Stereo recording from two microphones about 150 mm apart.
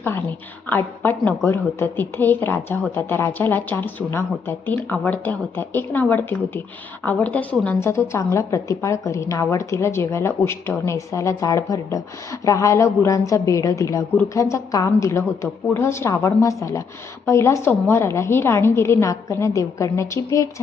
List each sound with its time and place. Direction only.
0.0 s a woman's voice: 15° left (ahead or behind)